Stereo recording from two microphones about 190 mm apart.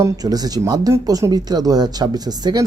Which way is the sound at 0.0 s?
20° right (ahead or behind).